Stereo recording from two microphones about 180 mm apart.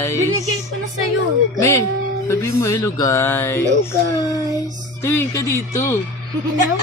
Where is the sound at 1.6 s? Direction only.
15° left (ahead or behind).